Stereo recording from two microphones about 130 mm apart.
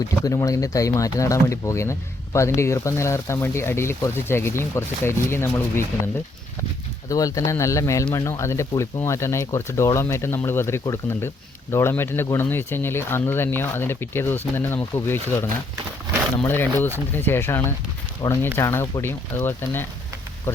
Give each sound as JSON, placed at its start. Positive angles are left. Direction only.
{"t": 0.2, "sound": "speech", "side_deg": 25}
{"t": 7.1, "sound": "speech", "side_deg": 25}
{"t": 18.2, "sound": "speech", "side_deg": 30}